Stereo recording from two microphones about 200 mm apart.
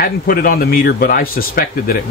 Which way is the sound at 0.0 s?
45° left (ahead or behind).